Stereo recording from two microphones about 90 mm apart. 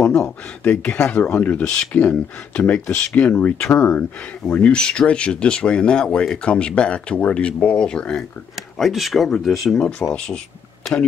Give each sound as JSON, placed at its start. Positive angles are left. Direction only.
{"t": 0.0, "sound": "speech", "side_deg": 5}
{"t": 0.7, "sound": "speech", "side_deg": 25}
{"t": 8.5, "sound": "speech", "side_deg": 0}